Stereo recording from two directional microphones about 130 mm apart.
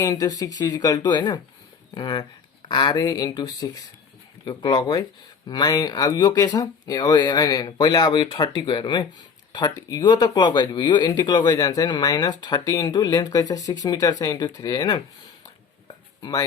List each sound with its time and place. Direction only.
0.0 s speech: 30° left (ahead or behind)